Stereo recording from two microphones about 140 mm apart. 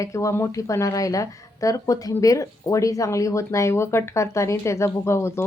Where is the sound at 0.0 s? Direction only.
20° left (ahead or behind).